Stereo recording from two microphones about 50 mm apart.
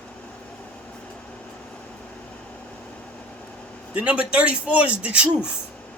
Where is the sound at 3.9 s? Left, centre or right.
Right.